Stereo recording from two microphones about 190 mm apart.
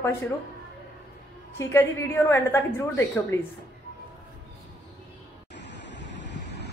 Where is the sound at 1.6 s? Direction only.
15° left (ahead or behind).